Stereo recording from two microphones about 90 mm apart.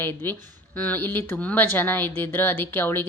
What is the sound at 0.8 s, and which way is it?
A woman's voice, 20° left (ahead or behind).